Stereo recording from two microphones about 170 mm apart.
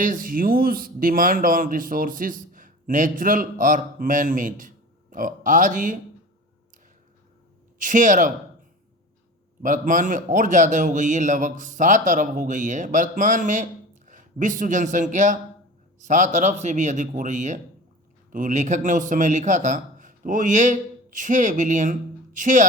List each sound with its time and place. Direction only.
0.0 s a man's voice: 55° right (ahead or behind)
7.8 s a man's voice: 50° right (ahead or behind)
9.6 s a man's voice: 50° right (ahead or behind)